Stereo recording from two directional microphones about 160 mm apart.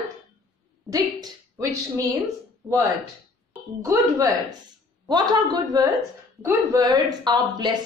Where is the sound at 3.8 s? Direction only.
20° right (ahead or behind).